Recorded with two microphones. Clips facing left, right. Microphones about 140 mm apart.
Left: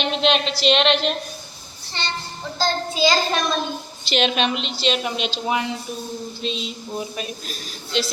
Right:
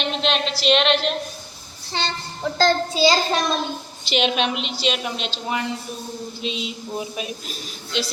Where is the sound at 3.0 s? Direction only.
30° right (ahead or behind).